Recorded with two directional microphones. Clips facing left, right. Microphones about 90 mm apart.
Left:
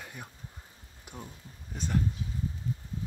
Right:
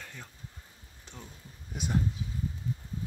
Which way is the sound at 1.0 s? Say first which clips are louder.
Left 4 dB; 10° left (ahead or behind).